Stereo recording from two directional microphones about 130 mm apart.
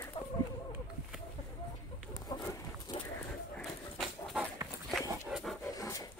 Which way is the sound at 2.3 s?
30° left (ahead or behind).